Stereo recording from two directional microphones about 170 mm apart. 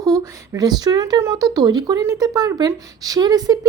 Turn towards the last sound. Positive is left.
turn(degrees=-25)  # may be behind; listen again after turning